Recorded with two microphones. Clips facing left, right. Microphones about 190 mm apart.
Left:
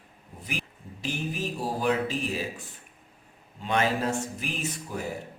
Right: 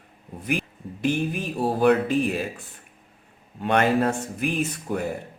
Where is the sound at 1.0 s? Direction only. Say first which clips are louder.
Right 7 dB; 60° right (ahead or behind).